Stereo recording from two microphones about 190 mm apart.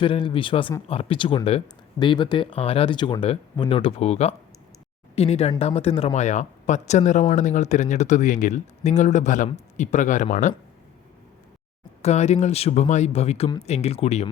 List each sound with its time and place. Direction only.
0.0 s speech: 25° left (ahead or behind)
12.0 s speech: 35° left (ahead or behind)